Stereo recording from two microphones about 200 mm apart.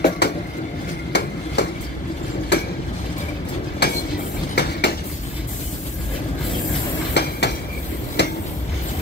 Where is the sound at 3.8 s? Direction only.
55° left (ahead or behind).